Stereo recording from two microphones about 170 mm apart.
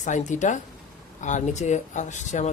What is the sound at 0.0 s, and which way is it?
Speech, 45° left (ahead or behind).